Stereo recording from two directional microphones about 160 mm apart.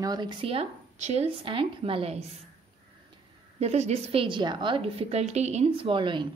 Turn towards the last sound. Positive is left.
turn(degrees=-30)  # may be behind; listen again after turning